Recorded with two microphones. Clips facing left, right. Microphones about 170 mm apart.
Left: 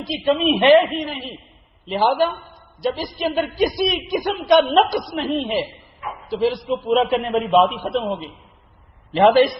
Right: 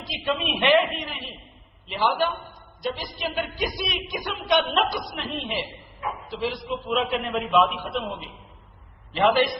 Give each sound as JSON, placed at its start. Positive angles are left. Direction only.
{"t": 0.1, "sound": "a woman's voice", "side_deg": 35}
{"t": 1.9, "sound": "a woman's voice", "side_deg": 40}
{"t": 9.1, "sound": "a woman's voice", "side_deg": 40}